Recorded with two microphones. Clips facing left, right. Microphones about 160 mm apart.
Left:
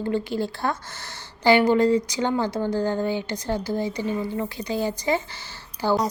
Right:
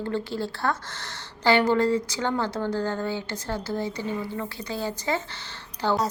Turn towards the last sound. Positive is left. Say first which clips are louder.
# left 2 dB
turn(degrees=10)  # may be behind; listen again after turning